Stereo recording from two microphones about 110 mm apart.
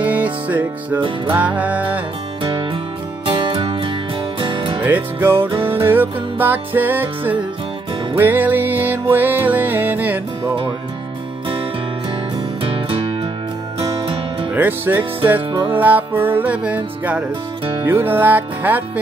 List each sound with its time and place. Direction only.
0.0 s music: 15° right (ahead or behind)
2.4 s music: 50° right (ahead or behind)
4.8 s music: 20° right (ahead or behind)
12.6 s music: 60° right (ahead or behind)
14.5 s music: 15° right (ahead or behind)